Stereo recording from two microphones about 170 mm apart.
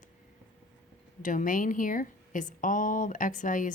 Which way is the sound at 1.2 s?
50° left (ahead or behind).